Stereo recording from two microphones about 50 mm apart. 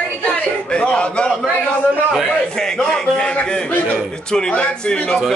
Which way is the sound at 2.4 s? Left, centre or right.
Centre.